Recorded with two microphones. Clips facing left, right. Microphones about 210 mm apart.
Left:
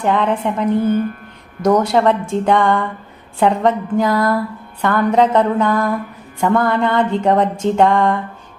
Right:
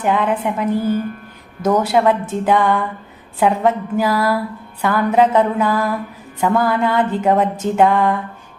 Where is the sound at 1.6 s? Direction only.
5° right (ahead or behind).